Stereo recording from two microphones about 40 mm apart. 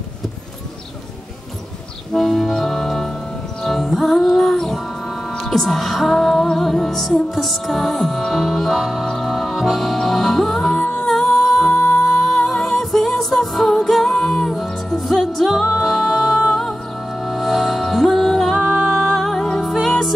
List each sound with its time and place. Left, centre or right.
2.1 s music: centre
11.1 s humming: centre
12.4 s music: centre